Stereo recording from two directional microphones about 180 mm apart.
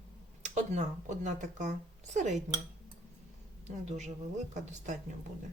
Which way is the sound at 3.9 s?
40° right (ahead or behind).